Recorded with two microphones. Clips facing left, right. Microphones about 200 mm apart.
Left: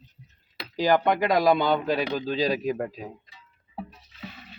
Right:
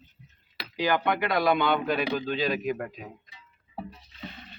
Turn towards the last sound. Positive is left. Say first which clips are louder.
# even
turn(degrees=0)  # may be behind; listen again after turning